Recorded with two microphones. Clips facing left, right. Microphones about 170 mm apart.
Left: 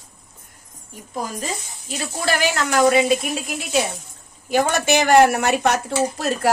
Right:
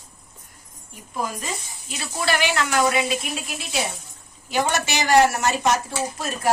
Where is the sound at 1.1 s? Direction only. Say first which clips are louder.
Left 1 dB; 40° left (ahead or behind).